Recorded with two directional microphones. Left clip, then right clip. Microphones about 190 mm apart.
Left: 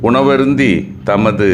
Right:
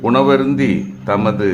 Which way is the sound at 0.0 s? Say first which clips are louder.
Left 2 dB; 20° left (ahead or behind).